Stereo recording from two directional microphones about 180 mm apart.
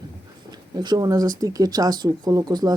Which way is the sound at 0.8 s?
20° right (ahead or behind).